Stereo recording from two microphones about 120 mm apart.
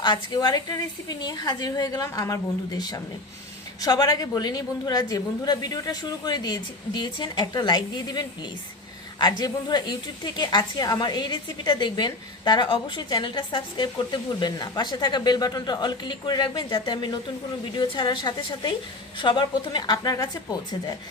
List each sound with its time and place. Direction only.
0.0 s a woman's voice: 35° left (ahead or behind)
9.4 s a woman's voice: 35° left (ahead or behind)